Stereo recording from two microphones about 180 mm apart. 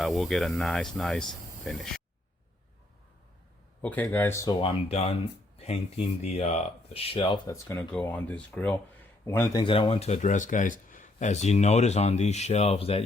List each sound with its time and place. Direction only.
0.0 s speech: centre (ahead or behind)
3.8 s speech: 10° left (ahead or behind)
4.6 s speech: 30° left (ahead or behind)